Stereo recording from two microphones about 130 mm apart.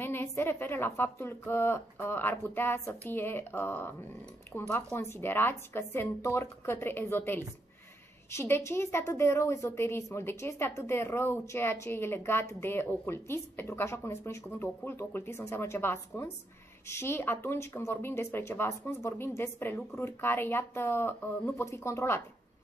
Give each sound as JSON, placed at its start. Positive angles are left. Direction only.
{"t": 0.0, "sound": "a woman's voice", "side_deg": 15}